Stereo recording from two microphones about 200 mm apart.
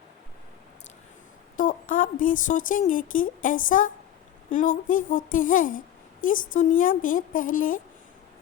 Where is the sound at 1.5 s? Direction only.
40° left (ahead or behind).